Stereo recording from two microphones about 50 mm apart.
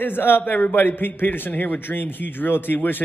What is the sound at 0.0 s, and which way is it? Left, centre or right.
Speech, left.